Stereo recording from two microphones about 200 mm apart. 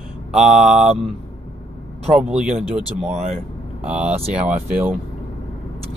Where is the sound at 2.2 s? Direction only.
5° right (ahead or behind).